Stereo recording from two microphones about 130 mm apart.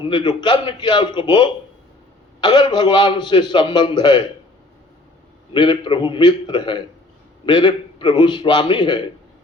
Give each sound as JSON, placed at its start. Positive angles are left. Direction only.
{"t": 0.0, "sound": "a man's voice", "side_deg": 35}
{"t": 5.5, "sound": "a man's voice", "side_deg": 35}